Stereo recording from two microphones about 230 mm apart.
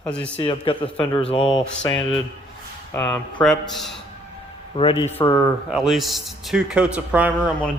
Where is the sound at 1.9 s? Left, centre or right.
Centre.